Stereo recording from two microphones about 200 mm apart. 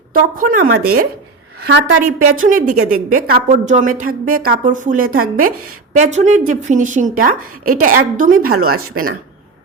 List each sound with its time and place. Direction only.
0.1 s a woman's voice: 45° right (ahead or behind)